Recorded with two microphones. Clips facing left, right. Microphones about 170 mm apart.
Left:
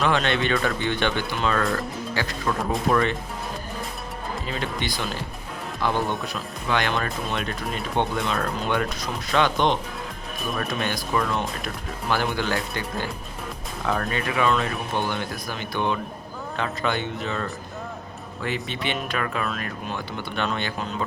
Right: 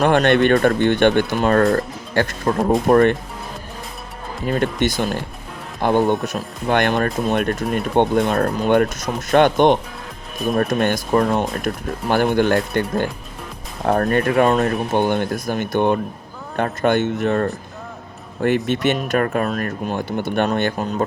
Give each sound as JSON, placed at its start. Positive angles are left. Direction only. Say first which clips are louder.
{"t": 0.0, "sound": "speech", "louder": "right 8 dB", "side_deg": -50}
{"t": 4.4, "sound": "speech", "louder": "right 12 dB", "side_deg": -55}